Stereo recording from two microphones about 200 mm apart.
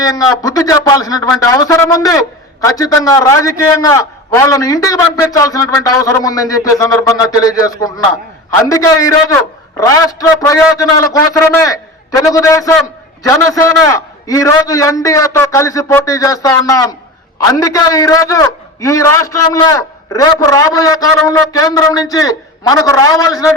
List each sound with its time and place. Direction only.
0.0 s a man's voice: 15° left (ahead or behind)